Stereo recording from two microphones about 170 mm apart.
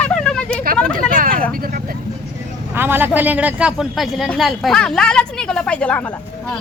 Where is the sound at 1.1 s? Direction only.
55° right (ahead or behind).